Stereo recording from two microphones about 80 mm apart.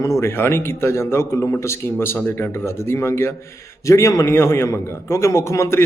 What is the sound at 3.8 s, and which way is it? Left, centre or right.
Speech, left.